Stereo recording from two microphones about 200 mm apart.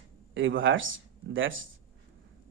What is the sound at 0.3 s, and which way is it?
Speech, 70° right (ahead or behind).